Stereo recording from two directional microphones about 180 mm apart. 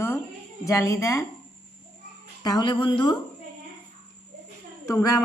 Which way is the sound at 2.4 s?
25° left (ahead or behind).